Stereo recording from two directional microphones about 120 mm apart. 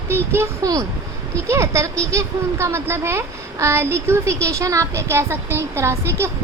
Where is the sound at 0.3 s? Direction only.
30° right (ahead or behind).